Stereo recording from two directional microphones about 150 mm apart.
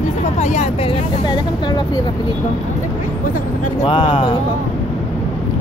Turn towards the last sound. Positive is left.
turn(degrees=35)  # may be behind; listen again after turning